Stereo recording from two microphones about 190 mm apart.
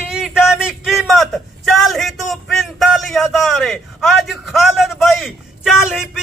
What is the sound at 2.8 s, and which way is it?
A man's voice, centre (ahead or behind).